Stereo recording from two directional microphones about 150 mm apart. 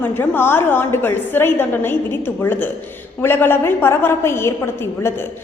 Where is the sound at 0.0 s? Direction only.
15° left (ahead or behind).